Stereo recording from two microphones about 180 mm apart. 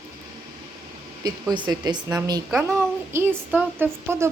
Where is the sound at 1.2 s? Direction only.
25° right (ahead or behind).